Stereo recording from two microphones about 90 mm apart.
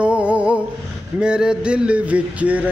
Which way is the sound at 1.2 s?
10° right (ahead or behind).